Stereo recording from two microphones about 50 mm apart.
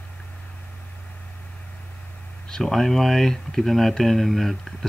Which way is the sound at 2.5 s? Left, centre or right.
Centre.